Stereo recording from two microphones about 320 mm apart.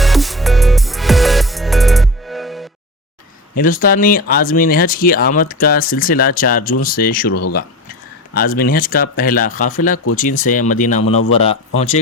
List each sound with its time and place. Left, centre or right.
0.0 s music: centre
3.6 s a man's voice: left